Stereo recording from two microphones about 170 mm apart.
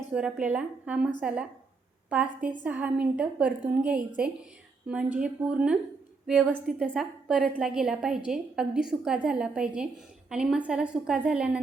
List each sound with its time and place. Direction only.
0.1 s a woman's voice: 5° right (ahead or behind)
5.1 s a woman's voice: 5° right (ahead or behind)